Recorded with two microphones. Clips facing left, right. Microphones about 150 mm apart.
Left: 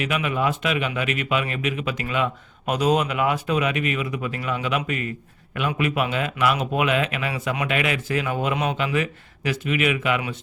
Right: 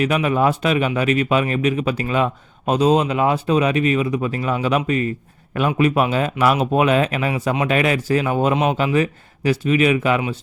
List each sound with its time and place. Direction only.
0.0 s a man's voice: 40° right (ahead or behind)